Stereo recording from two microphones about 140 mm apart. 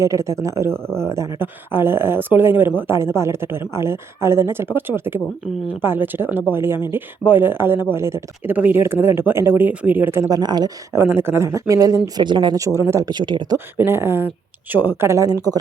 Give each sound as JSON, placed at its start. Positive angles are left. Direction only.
{"t": 0.0, "sound": "speech", "side_deg": -20}
{"t": 10.9, "sound": "speech", "side_deg": -15}
{"t": 13.7, "sound": "speech", "side_deg": -15}